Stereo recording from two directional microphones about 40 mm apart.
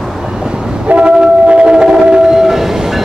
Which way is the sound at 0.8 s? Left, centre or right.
Right.